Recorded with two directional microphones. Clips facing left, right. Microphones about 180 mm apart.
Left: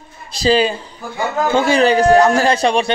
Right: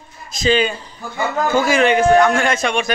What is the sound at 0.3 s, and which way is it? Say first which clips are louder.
A man's voice: left 2 dB; 35° left (ahead or behind).